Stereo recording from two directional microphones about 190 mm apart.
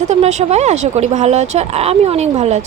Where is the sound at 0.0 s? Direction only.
35° right (ahead or behind).